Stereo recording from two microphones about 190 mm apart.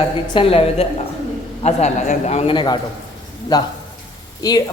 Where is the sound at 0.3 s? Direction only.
30° left (ahead or behind).